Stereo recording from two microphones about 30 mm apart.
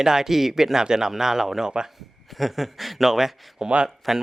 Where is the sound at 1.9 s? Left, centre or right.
Centre.